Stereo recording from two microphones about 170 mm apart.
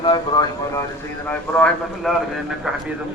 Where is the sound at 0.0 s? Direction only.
25° left (ahead or behind).